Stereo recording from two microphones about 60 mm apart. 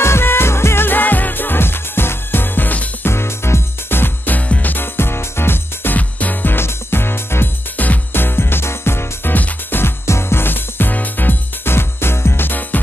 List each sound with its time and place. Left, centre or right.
0.0 s music: left
3.1 s music: left
4.4 s music: left
5.9 s music: left